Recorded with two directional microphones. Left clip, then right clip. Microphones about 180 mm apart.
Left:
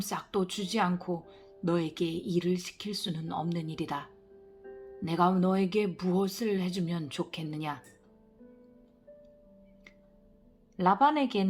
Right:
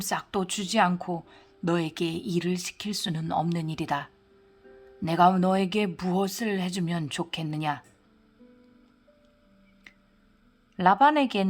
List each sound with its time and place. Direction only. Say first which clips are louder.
0.0 s speech: right 3 dB; 35° right (ahead or behind)
10.8 s speech: right 5 dB; 30° right (ahead or behind)